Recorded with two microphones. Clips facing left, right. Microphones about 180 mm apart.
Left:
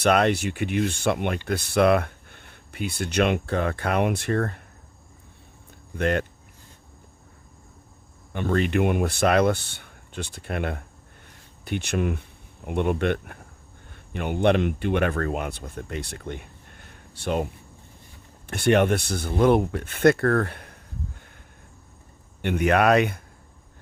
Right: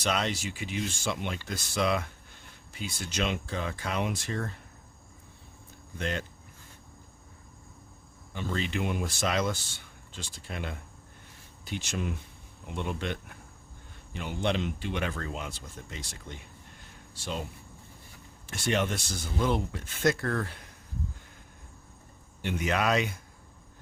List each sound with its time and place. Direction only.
0.0 s speech: 60° left (ahead or behind)
6.0 s speech: 60° left (ahead or behind)
8.3 s speech: 60° left (ahead or behind)
18.4 s speech: 60° left (ahead or behind)
22.4 s speech: 60° left (ahead or behind)